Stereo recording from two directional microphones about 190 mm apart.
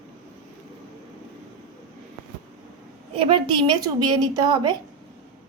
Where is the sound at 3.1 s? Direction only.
25° right (ahead or behind).